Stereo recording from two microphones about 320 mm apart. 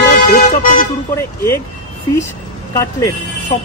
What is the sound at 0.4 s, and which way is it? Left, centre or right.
Speech, left.